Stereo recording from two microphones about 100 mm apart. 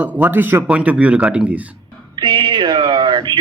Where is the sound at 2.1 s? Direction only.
55° right (ahead or behind).